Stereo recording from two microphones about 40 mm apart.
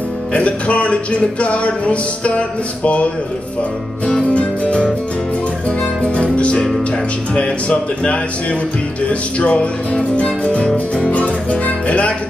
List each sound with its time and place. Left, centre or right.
0.3 s music: left
4.1 s music: left
9.4 s music: left